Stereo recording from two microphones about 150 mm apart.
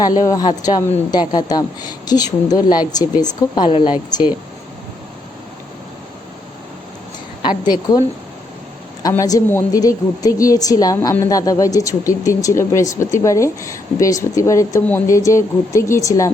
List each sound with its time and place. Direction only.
0.0 s a woman's voice: 25° left (ahead or behind)
7.4 s a woman's voice: 30° left (ahead or behind)
9.0 s a woman's voice: 25° left (ahead or behind)